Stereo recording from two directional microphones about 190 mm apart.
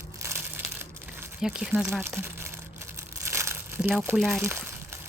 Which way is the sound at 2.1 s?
10° right (ahead or behind).